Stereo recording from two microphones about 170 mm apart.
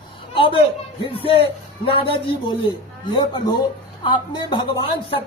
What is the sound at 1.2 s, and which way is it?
Speech, 35° left (ahead or behind).